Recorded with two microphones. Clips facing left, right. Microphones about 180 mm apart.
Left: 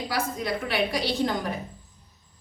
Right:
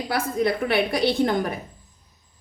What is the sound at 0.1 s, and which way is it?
A woman's voice, 55° right (ahead or behind).